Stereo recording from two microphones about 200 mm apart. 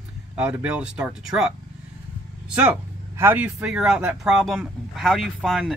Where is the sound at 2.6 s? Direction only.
10° right (ahead or behind).